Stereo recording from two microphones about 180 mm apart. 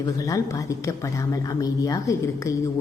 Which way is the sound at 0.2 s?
20° left (ahead or behind).